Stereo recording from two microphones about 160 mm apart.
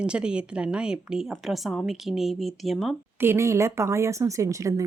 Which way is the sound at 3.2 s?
15° right (ahead or behind).